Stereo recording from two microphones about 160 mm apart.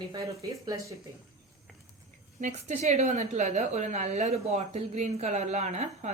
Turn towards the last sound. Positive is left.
turn(degrees=-45)  # may be behind; listen again after turning